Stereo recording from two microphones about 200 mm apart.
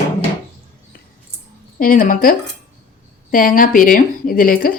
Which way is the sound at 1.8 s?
40° left (ahead or behind).